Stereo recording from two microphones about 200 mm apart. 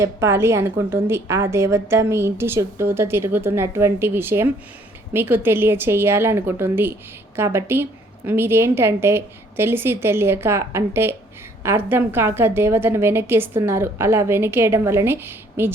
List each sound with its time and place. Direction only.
0.0 s a woman's voice: 15° right (ahead or behind)